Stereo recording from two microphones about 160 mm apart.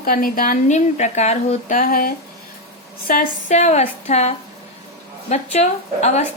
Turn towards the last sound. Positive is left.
turn(degrees=45)  # may be behind; listen again after turning